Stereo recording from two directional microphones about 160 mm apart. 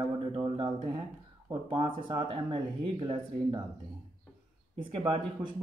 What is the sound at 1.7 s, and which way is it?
Speech, 30° right (ahead or behind).